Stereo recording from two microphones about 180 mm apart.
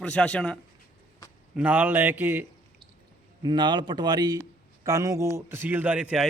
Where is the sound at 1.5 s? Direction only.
10° right (ahead or behind).